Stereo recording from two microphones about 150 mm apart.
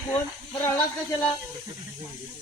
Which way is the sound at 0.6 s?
20° left (ahead or behind).